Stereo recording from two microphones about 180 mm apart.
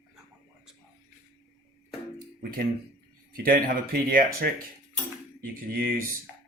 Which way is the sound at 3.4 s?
55° right (ahead or behind).